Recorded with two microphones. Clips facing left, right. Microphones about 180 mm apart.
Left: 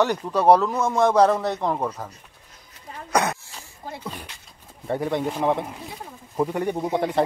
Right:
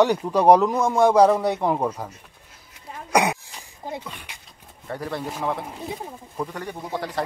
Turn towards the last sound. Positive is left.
turn(degrees=25)  # may be behind; listen again after turning